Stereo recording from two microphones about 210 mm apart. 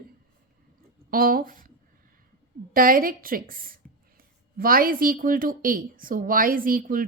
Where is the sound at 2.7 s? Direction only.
40° right (ahead or behind).